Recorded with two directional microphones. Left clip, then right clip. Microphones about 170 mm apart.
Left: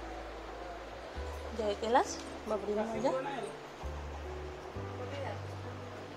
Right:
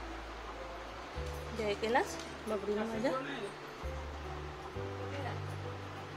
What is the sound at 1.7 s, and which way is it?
Speech, centre (ahead or behind).